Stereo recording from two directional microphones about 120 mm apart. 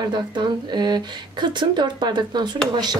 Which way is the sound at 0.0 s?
40° right (ahead or behind).